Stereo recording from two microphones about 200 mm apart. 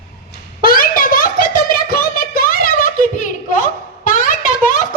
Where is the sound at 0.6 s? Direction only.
45° left (ahead or behind).